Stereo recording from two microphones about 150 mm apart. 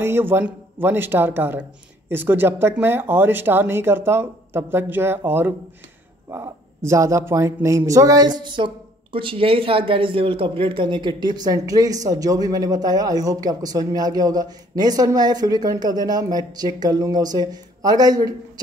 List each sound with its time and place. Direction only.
0.0 s speech: 15° right (ahead or behind)